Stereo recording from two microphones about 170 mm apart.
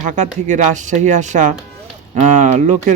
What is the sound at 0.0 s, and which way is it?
Speech, 45° right (ahead or behind).